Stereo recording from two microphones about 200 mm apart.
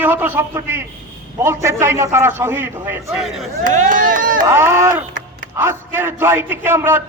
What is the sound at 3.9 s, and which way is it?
Speech, 40° right (ahead or behind).